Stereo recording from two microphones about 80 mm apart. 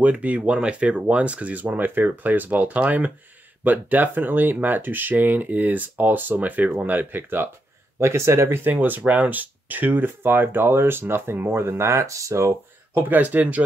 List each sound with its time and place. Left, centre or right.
0.0 s speech: centre; by 12.5 s right
12.9 s speech: right